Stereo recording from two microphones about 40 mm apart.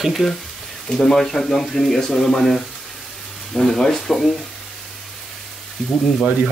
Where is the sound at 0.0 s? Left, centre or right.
Centre.